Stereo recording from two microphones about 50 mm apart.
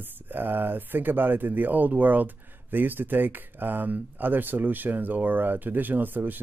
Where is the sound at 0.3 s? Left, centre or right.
Right.